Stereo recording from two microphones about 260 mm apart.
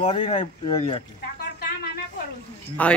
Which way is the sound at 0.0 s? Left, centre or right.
Left.